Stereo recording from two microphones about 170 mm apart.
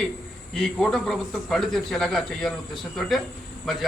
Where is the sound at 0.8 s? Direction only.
Centre (ahead or behind).